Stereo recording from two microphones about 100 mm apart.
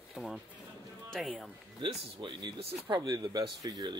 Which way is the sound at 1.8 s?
50° right (ahead or behind).